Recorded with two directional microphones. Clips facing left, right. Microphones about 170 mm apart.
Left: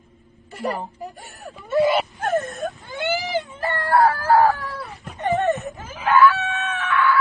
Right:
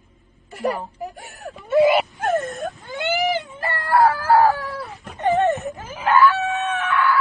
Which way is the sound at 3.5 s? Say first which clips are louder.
Left 2 dB; centre (ahead or behind).